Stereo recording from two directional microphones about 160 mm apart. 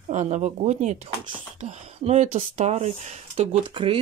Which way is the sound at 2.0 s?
40° right (ahead or behind).